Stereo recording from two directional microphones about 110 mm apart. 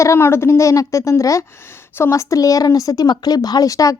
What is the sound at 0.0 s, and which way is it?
A woman's voice, 25° left (ahead or behind).